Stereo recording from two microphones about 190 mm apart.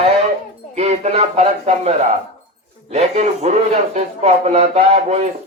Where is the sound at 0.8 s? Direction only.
35° right (ahead or behind).